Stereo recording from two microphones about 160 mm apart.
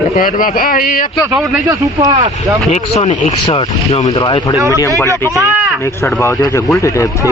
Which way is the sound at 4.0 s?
25° left (ahead or behind).